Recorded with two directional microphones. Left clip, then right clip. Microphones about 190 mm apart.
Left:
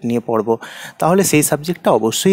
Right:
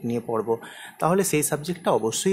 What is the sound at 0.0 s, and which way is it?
Speech, 40° left (ahead or behind).